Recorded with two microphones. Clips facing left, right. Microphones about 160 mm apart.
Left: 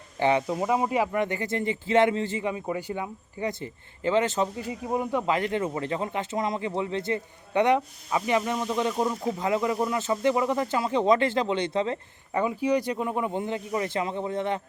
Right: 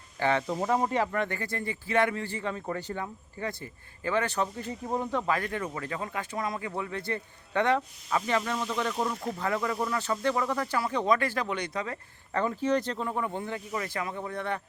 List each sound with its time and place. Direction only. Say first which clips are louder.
0.2 s speech: left 4 dB; 15° left (ahead or behind)
12.3 s speech: left 2 dB; 10° left (ahead or behind)